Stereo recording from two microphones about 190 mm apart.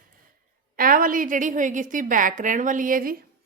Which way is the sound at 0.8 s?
50° right (ahead or behind).